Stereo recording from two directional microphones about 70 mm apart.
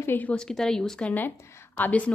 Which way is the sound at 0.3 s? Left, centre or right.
Centre.